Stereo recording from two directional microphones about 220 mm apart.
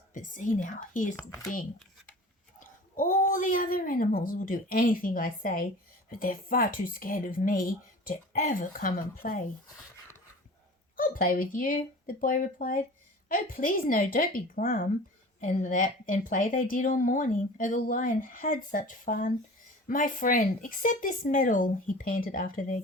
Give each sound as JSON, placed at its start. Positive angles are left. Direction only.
{"t": 0.1, "sound": "a woman's voice", "side_deg": 35}
{"t": 2.6, "sound": "a woman's voice", "side_deg": 35}
{"t": 10.9, "sound": "a woman's voice", "side_deg": 40}